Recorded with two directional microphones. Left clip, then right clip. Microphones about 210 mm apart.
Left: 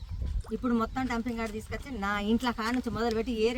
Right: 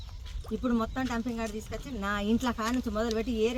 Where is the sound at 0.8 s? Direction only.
15° left (ahead or behind).